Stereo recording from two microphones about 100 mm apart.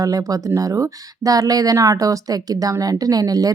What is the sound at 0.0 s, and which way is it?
Speech, 35° right (ahead or behind).